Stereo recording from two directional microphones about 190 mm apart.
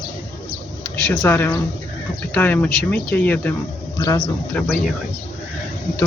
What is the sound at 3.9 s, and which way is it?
Speech, 25° left (ahead or behind).